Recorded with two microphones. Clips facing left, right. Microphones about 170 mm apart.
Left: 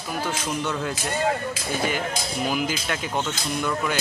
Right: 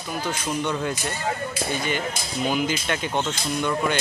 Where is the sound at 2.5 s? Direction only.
5° left (ahead or behind).